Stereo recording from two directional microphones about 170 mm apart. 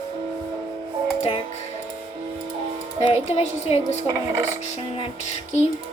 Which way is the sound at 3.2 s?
40° left (ahead or behind).